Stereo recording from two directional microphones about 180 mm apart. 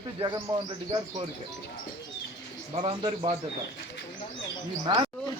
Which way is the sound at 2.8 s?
30° right (ahead or behind).